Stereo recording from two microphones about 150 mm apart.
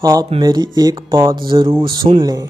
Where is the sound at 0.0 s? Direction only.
25° right (ahead or behind).